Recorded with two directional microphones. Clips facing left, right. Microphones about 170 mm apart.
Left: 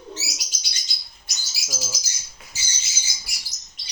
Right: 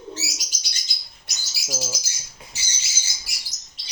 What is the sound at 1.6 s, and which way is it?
Bird, 35° right (ahead or behind).